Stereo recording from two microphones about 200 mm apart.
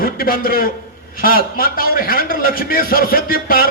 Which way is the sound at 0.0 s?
45° left (ahead or behind).